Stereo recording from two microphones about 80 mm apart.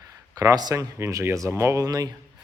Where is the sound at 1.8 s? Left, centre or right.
Right.